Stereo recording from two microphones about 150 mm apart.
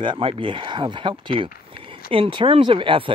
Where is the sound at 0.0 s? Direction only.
35° right (ahead or behind).